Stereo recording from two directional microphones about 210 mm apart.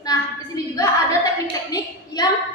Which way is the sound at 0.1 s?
15° left (ahead or behind).